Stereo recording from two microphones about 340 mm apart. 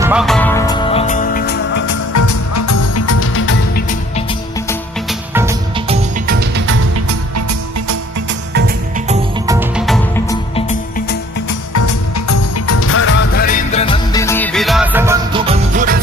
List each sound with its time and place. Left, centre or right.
0.0 s music: centre; by 1.8 s left
1.9 s music: left
4.7 s music: centre
6.2 s music: right
8.3 s music: right
9.5 s music: centre
11.7 s music: left; by 16.0 s right